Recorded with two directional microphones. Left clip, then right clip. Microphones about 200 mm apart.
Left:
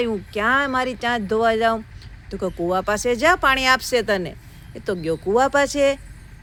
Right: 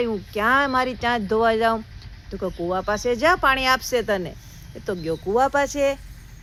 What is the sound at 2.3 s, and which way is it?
Speech, 15° left (ahead or behind).